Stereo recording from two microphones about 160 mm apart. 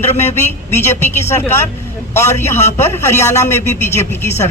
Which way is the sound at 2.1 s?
15° left (ahead or behind).